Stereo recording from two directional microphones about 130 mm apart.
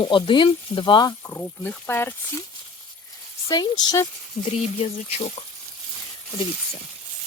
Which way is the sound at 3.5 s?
30° left (ahead or behind).